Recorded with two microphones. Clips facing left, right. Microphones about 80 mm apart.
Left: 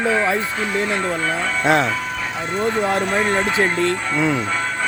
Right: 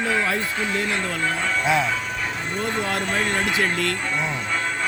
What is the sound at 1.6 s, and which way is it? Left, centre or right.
Speech, left.